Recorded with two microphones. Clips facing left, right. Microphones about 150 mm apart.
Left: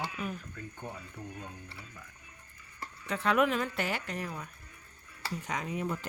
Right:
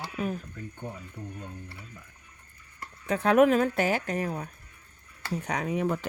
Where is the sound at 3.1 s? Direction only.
45° right (ahead or behind).